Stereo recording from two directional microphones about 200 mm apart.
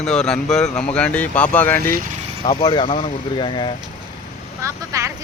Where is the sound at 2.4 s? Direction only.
20° left (ahead or behind).